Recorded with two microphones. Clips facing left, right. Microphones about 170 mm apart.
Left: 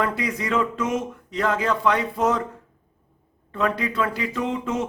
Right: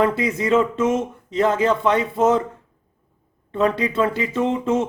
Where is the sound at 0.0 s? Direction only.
25° right (ahead or behind).